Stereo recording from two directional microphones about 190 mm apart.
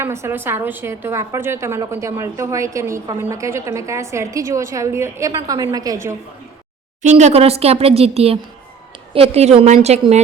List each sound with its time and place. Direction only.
0.0 s a woman's voice: 15° right (ahead or behind)
7.0 s speech: 35° right (ahead or behind)